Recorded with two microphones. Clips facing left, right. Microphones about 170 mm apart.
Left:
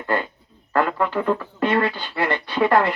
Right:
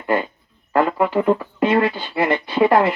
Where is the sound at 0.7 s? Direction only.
15° right (ahead or behind).